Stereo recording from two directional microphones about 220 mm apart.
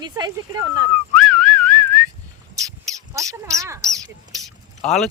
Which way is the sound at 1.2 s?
5° left (ahead or behind).